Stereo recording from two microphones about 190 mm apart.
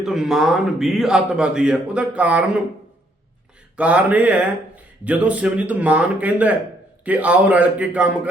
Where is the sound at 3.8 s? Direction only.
5° right (ahead or behind).